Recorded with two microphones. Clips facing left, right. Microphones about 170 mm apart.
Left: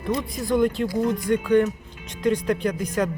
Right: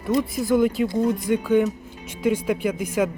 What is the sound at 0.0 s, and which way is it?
Speech, 5° right (ahead or behind).